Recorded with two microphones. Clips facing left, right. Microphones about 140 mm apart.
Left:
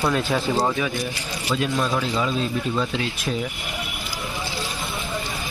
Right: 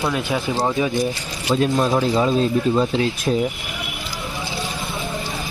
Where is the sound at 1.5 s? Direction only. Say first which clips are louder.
Right 5 dB; 35° right (ahead or behind).